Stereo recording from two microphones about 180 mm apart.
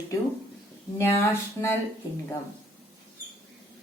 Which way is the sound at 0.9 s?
15° left (ahead or behind).